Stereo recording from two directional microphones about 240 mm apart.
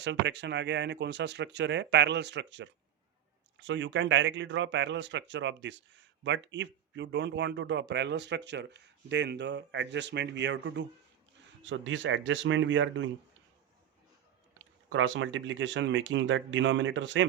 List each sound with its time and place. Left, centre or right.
0.0 s speech: right
14.6 s speech: right